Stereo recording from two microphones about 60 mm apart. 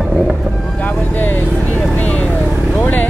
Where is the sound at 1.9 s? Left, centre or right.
Left.